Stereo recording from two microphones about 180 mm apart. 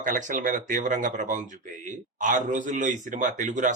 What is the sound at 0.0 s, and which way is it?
Speech, 45° right (ahead or behind).